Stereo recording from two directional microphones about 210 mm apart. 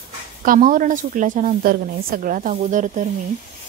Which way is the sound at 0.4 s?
40° right (ahead or behind).